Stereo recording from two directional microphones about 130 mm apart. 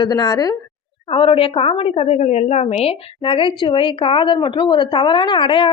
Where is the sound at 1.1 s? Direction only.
45° left (ahead or behind).